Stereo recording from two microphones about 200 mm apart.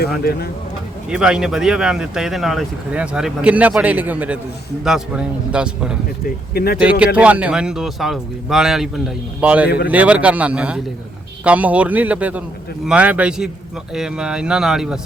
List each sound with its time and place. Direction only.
0.2 s speech: 50° left (ahead or behind)
1.1 s speech: 5° right (ahead or behind)
6.5 s speech: 50° left (ahead or behind)
7.0 s speech: 5° right (ahead or behind)
9.6 s speech: 50° left (ahead or behind)
9.9 s a man's voice: 5° right (ahead or behind)